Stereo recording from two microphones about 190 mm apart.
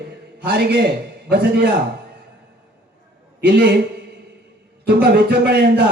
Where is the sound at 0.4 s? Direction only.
60° right (ahead or behind).